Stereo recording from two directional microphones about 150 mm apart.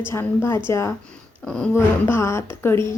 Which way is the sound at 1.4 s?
5° left (ahead or behind).